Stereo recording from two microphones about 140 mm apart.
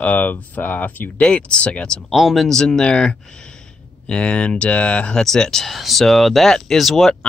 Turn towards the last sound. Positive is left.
turn(degrees=5)  # may be behind; listen again after turning